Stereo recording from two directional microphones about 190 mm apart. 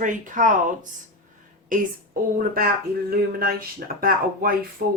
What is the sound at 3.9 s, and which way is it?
Speech, 50° right (ahead or behind).